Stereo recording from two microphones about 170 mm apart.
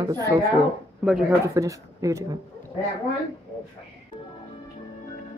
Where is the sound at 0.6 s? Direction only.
5° right (ahead or behind).